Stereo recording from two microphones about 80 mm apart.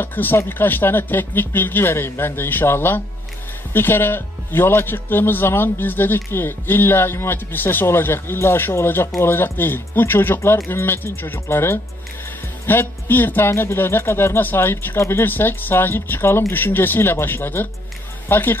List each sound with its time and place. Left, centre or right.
0.0 s speech: left